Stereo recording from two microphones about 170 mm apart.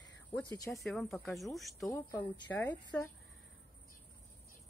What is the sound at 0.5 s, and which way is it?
Speech, 20° left (ahead or behind).